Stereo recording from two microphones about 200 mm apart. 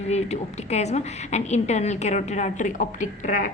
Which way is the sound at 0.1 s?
35° left (ahead or behind).